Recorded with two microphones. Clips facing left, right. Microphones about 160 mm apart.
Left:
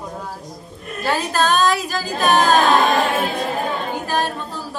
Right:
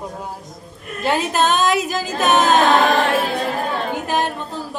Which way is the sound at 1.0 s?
20° right (ahead or behind).